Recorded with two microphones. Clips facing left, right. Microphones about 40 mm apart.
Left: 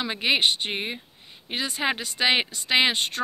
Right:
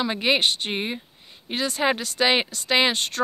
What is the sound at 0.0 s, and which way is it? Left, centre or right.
Speech, centre.